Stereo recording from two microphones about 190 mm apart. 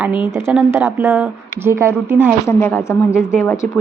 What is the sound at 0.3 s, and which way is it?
Speech, 15° right (ahead or behind).